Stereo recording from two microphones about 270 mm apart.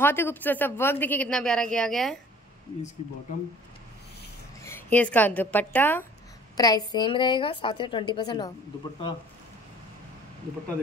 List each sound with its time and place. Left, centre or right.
0.0 s a woman's voice: centre
4.6 s a woman's voice: centre